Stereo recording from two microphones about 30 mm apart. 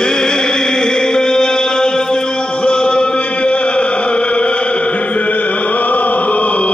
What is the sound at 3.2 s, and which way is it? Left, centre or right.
Chant, left.